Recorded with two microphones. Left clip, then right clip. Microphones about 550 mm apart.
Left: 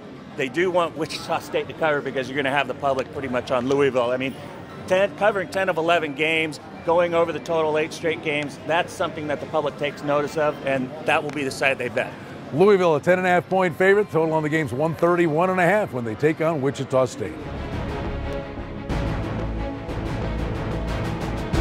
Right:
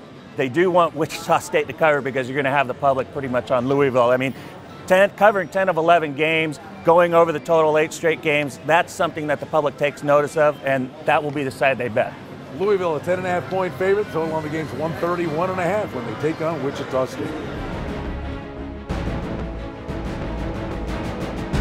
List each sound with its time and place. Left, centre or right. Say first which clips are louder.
0.4 s a man's voice: right 4 dB; right
12.5 s speech: left 4 dB; left